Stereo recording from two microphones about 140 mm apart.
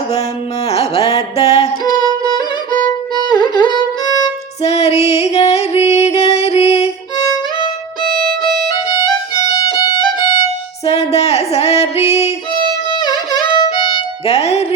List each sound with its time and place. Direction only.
0.7 s music: 45° left (ahead or behind)
3.4 s music: 30° left (ahead or behind)
4.6 s music: 50° left (ahead or behind)
8.0 s music: 90° right
9.3 s violin: 35° left (ahead or behind)
10.8 s music: 50° left (ahead or behind)
13.0 s music: 30° left (ahead or behind); by 14.7 s 50° left (ahead or behind)